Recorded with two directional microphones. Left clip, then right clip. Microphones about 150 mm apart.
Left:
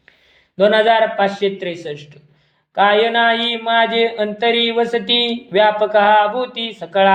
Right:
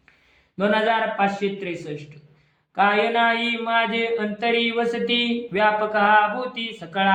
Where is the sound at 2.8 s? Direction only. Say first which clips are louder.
Left 6 dB; 15° left (ahead or behind).